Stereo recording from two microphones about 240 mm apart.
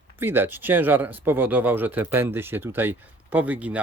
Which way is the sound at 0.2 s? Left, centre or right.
Centre.